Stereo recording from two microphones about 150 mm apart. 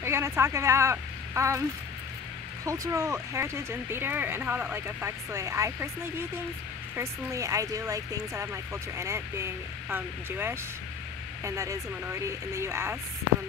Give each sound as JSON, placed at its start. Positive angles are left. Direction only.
{"t": 0.0, "sound": "a woman's voice", "side_deg": -15}
{"t": 2.6, "sound": "speech", "side_deg": -20}